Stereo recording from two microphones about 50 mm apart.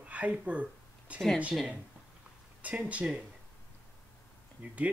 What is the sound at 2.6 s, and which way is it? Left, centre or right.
Speech, right.